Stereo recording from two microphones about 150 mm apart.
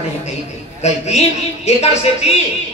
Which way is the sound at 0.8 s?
45° left (ahead or behind).